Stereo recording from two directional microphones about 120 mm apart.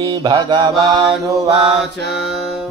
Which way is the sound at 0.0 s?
40° right (ahead or behind).